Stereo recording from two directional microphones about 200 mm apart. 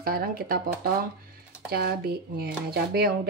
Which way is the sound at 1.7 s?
50° right (ahead or behind).